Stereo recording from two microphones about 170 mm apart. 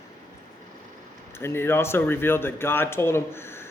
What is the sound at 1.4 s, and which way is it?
A man's voice, 15° left (ahead or behind).